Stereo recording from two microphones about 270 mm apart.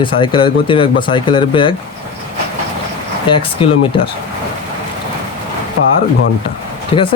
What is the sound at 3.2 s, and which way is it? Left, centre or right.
Speech, centre.